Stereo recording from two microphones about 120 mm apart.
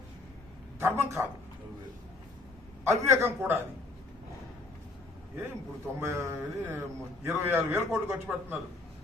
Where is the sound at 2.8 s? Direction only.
25° right (ahead or behind).